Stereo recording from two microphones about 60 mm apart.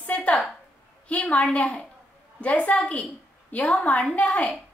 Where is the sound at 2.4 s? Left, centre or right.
Left.